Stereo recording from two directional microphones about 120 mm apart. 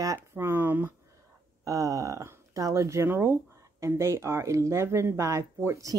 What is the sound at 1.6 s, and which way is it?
Speech, 30° right (ahead or behind).